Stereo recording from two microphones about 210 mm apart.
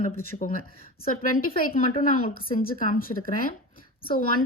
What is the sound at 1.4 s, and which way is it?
Speech, 40° left (ahead or behind).